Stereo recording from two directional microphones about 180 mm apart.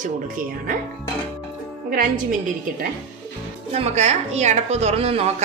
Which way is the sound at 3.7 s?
40° right (ahead or behind).